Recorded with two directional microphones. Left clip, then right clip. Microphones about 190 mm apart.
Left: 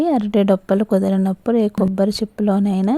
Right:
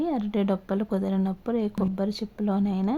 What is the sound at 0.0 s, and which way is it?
A woman's voice, 35° left (ahead or behind).